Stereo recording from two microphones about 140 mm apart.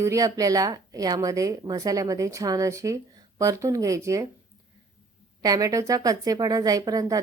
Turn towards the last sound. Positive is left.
turn(degrees=-25)  # may be behind; listen again after turning